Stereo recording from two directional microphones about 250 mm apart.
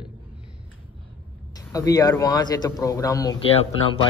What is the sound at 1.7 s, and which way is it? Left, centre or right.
A man's voice, centre.